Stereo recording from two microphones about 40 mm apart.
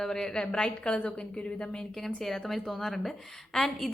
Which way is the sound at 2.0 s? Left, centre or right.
Centre.